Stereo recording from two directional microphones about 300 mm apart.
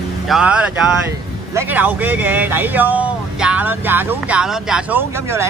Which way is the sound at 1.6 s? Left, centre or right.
Centre.